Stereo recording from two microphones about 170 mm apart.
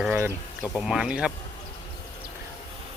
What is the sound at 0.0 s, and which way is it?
Speech, 10° right (ahead or behind).